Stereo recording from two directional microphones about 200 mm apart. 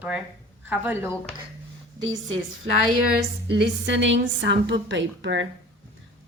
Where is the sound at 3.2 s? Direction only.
55° right (ahead or behind).